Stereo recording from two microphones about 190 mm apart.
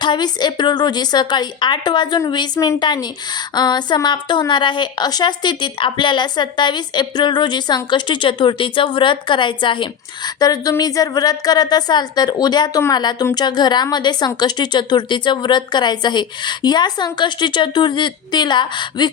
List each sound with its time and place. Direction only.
0.0 s a woman's voice: 25° left (ahead or behind)